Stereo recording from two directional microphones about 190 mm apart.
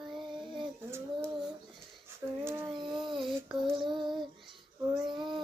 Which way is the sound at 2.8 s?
25° right (ahead or behind).